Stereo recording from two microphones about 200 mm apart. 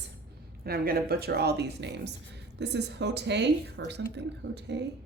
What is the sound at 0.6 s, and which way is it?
Speech, 50° right (ahead or behind).